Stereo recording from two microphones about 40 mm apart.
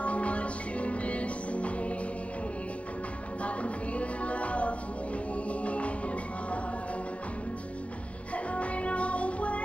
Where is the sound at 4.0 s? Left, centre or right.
Left.